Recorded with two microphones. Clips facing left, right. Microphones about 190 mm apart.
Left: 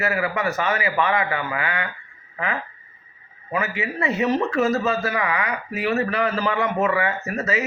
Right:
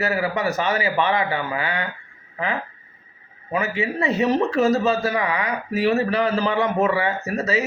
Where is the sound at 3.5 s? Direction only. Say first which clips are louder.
Right 2 dB; 30° right (ahead or behind).